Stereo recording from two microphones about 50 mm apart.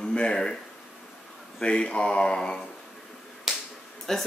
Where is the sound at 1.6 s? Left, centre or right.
Centre.